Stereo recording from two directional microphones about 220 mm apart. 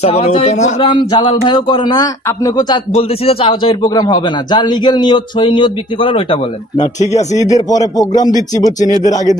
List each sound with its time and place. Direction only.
0.0 s a man's voice: 30° left (ahead or behind)
0.7 s a man's voice: 20° left (ahead or behind)
7.3 s speech: 15° left (ahead or behind)